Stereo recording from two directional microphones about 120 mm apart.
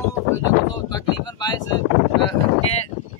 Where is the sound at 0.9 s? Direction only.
35° left (ahead or behind).